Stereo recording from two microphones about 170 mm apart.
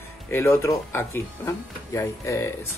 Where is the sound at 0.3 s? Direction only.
15° left (ahead or behind).